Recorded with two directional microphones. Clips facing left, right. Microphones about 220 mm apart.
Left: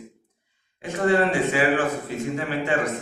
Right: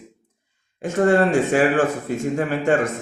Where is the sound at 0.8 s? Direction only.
45° right (ahead or behind).